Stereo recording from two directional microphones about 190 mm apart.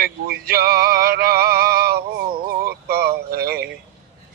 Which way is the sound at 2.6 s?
55° right (ahead or behind).